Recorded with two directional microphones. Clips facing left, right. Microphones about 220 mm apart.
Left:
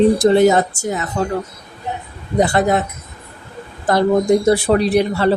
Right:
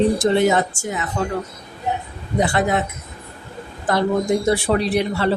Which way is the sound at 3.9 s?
40° left (ahead or behind).